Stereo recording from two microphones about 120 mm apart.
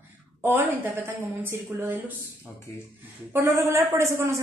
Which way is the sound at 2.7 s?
30° left (ahead or behind).